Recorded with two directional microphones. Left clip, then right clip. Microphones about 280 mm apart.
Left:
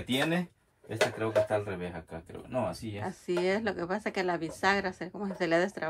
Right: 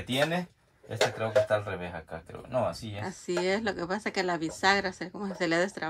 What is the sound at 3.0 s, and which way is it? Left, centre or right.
A woman's voice, centre.